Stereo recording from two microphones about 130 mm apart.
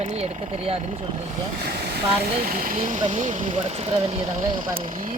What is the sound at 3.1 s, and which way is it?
Speech, 65° right (ahead or behind).